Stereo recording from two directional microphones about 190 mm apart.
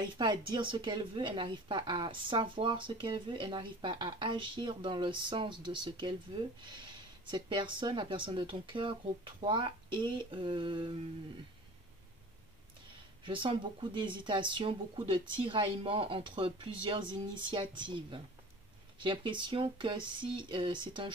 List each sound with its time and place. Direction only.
0.0 s speech: 25° right (ahead or behind)
13.2 s speech: 25° right (ahead or behind)